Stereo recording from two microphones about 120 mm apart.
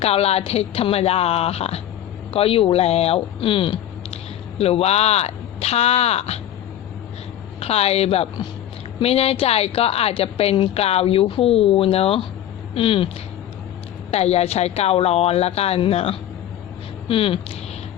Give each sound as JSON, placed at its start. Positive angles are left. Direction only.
{"t": 0.0, "sound": "a woman's voice", "side_deg": 60}
{"t": 7.6, "sound": "a woman's voice", "side_deg": 60}
{"t": 14.1, "sound": "a woman's voice", "side_deg": 60}